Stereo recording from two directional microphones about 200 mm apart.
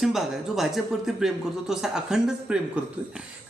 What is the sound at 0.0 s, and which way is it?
Speech, centre (ahead or behind).